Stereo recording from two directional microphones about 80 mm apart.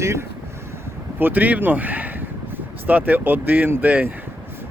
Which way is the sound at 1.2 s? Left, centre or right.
Right.